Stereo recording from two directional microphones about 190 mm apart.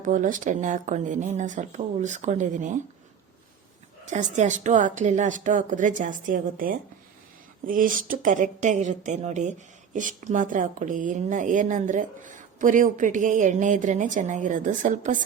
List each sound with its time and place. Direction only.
0.0 s speech: 45° right (ahead or behind)
4.1 s a woman's voice: 40° right (ahead or behind)